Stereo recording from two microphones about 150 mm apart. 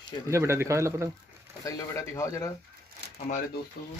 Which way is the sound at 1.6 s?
20° left (ahead or behind).